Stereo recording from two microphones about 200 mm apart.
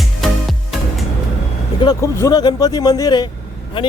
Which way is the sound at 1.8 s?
15° left (ahead or behind).